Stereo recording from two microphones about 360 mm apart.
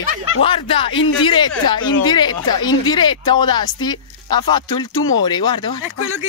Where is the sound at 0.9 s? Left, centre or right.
Left.